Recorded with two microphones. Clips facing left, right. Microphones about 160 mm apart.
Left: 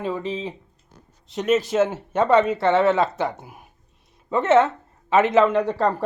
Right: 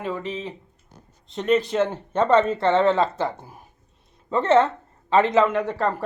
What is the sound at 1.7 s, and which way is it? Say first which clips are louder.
A woman's voice: left 2 dB; 5° left (ahead or behind).